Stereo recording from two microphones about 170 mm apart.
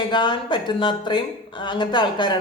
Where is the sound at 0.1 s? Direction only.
25° left (ahead or behind).